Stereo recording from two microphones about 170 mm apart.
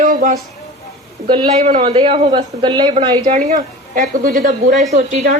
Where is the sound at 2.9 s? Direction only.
40° right (ahead or behind).